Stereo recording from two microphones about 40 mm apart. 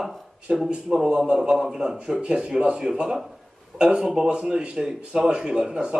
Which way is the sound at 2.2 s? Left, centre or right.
Right.